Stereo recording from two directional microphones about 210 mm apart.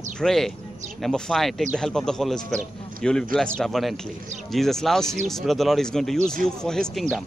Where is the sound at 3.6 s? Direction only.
Centre (ahead or behind).